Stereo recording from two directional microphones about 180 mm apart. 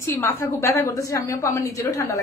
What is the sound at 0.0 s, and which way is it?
A woman's voice, 15° left (ahead or behind).